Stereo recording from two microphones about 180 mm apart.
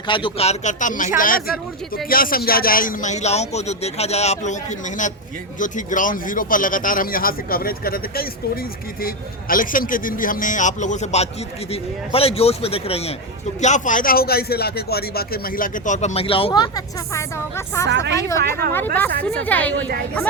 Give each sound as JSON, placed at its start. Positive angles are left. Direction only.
{"t": 0.1, "sound": "a man's voice", "side_deg": 25}
{"t": 5.5, "sound": "a man's voice", "side_deg": 45}
{"t": 16.5, "sound": "a woman's voice", "side_deg": 20}
{"t": 17.8, "sound": "speech", "side_deg": -75}
{"t": 18.2, "sound": "a woman's voice", "side_deg": 15}